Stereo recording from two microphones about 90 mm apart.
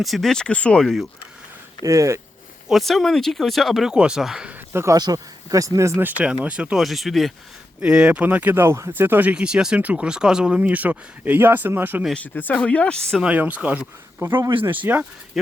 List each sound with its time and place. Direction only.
0.0 s speech: centre (ahead or behind)
1.8 s speech: 35° right (ahead or behind)
2.6 s speech: centre (ahead or behind)
4.7 s speech: 30° right (ahead or behind)
4.9 s speech: 45° right (ahead or behind)
6.0 s speech: 20° right (ahead or behind)
6.8 s speech: centre (ahead or behind)
7.8 s speech: 10° right (ahead or behind)
12.1 s speech: 20° left (ahead or behind)
13.2 s speech: 15° right (ahead or behind)